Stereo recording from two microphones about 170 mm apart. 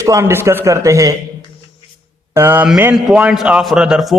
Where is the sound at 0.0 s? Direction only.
15° right (ahead or behind).